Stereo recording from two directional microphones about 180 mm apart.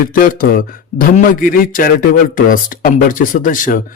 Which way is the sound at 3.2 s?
50° left (ahead or behind).